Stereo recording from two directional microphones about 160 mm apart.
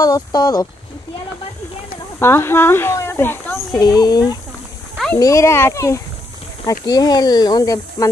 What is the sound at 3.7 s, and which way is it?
Speech, 25° left (ahead or behind).